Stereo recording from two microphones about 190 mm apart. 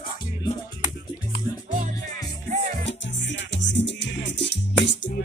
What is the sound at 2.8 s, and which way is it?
Music, 70° left (ahead or behind).